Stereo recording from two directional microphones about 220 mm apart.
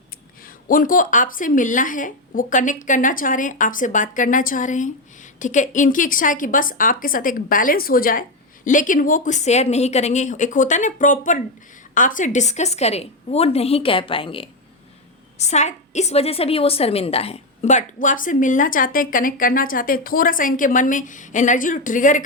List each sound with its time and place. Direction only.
0.4 s a woman's voice: 40° left (ahead or behind)